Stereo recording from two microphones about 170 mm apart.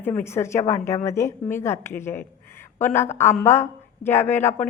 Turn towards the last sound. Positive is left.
turn(degrees=10)  # may be behind; listen again after turning